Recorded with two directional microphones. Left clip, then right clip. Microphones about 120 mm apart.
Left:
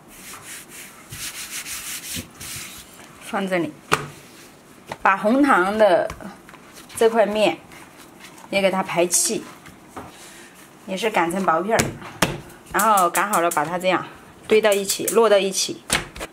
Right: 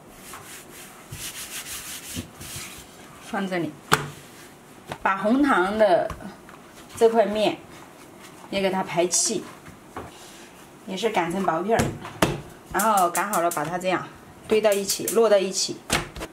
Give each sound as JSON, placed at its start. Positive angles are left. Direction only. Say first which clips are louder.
{"t": 3.3, "sound": "speech", "louder": "left 5 dB", "side_deg": 20}
{"t": 5.0, "sound": "speech", "louder": "left 4 dB", "side_deg": 25}
{"t": 10.9, "sound": "speech", "louder": "left 3 dB", "side_deg": 25}
{"t": 11.7, "sound": "a sound", "louder": "left 2 dB", "side_deg": 15}
{"t": 12.8, "sound": "speech", "louder": "left 4 dB", "side_deg": 15}